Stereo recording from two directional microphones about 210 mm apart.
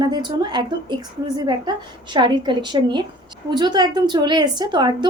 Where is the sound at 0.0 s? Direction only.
20° right (ahead or behind).